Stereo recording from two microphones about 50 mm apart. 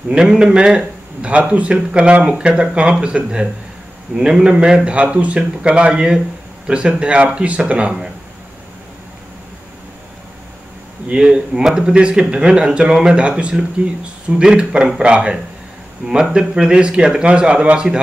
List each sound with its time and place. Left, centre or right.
0.1 s speech: centre
0.7 s a sound: right
1.5 s speech: right
11.1 s speech: centre